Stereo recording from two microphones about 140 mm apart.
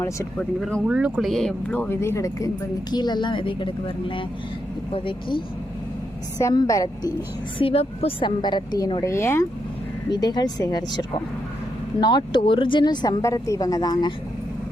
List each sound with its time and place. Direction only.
0.3 s speech: 5° left (ahead or behind)
0.9 s speech: 10° right (ahead or behind); by 5.4 s 40° left (ahead or behind)
6.4 s speech: 25° left (ahead or behind)
7.6 s speech: 45° left (ahead or behind); by 9.5 s 20° left (ahead or behind)
10.1 s speech: 30° left (ahead or behind)